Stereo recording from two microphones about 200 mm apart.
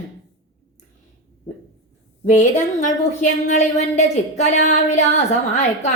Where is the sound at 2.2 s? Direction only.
35° left (ahead or behind).